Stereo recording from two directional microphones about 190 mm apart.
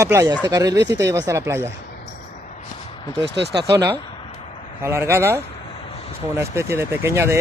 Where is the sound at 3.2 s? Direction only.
65° right (ahead or behind).